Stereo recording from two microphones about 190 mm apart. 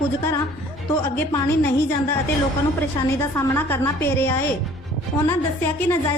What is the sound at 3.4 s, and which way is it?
A woman's voice, 10° left (ahead or behind).